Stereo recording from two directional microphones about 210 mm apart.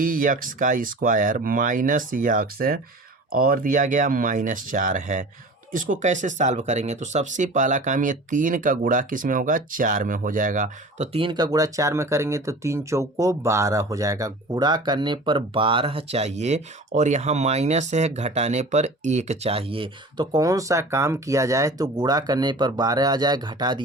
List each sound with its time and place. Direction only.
0.0 s speech: 40° right (ahead or behind); by 23.8 s 20° right (ahead or behind)